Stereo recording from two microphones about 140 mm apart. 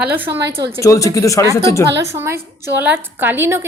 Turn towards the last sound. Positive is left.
turn(degrees=-15)  # may be behind; listen again after turning